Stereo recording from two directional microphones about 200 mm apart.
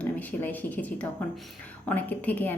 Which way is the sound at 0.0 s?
5° left (ahead or behind).